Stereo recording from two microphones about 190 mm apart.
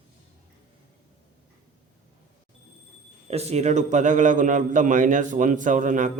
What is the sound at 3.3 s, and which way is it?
A man's voice, 35° right (ahead or behind).